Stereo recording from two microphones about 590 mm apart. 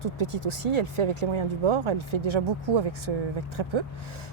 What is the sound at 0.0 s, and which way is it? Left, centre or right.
Speech, right.